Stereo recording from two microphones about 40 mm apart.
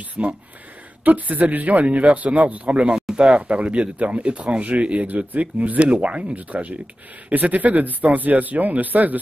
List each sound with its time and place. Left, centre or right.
0.2 s speech: right
1.0 s speech: right
5.0 s speech: right